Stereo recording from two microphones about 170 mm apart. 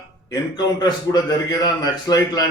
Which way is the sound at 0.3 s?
25° left (ahead or behind).